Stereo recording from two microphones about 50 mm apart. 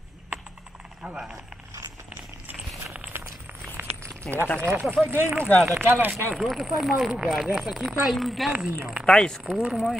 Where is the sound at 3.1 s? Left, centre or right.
Right.